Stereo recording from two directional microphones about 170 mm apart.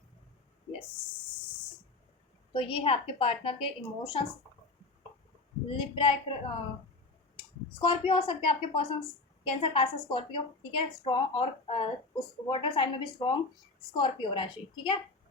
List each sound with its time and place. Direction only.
2.5 s a woman's voice: 30° left (ahead or behind)
5.6 s a woman's voice: 30° left (ahead or behind)
7.8 s a woman's voice: 30° left (ahead or behind)